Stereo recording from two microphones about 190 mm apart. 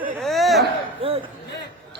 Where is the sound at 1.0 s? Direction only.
30° right (ahead or behind).